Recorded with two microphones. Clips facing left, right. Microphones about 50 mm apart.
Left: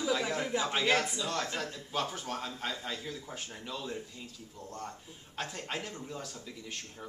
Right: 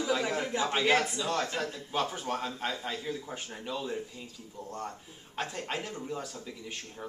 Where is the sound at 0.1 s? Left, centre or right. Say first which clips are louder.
Right 2 dB; centre.